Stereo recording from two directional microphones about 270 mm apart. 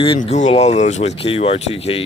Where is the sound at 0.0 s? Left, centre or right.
Left.